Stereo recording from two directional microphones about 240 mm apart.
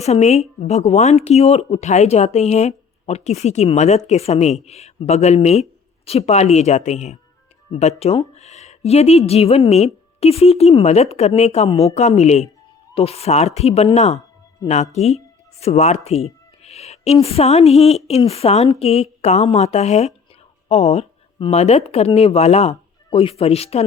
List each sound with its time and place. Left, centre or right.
0.0 s speech: left